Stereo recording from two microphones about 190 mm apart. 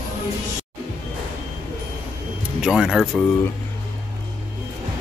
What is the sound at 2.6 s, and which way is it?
Speech, 5° right (ahead or behind).